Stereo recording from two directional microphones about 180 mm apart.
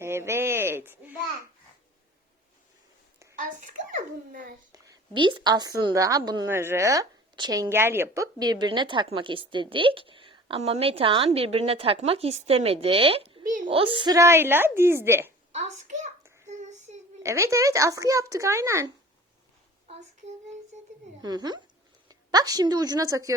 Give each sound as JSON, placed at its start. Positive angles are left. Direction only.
{"t": 0.0, "sound": "a sound", "side_deg": -15}
{"t": 3.9, "sound": "a child's voice", "side_deg": -50}
{"t": 4.7, "sound": "a woman's voice", "side_deg": -25}
{"t": 15.5, "sound": "a child's voice", "side_deg": -40}
{"t": 16.5, "sound": "child singing", "side_deg": -40}
{"t": 17.2, "sound": "a woman's voice", "side_deg": -15}
{"t": 21.2, "sound": "a woman's voice", "side_deg": -20}